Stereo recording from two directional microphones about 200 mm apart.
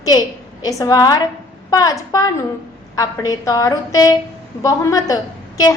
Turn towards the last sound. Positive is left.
turn(degrees=20)  # may be behind; listen again after turning